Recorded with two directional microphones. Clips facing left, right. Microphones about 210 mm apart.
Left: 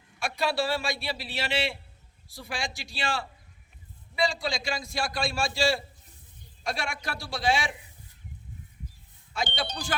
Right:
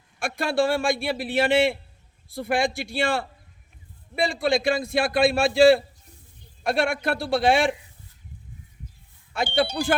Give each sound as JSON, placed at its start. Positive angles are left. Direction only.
{"t": 0.2, "sound": "a man's voice", "side_deg": -50}
{"t": 9.3, "sound": "speech", "side_deg": -55}
{"t": 9.8, "sound": "speech", "side_deg": -10}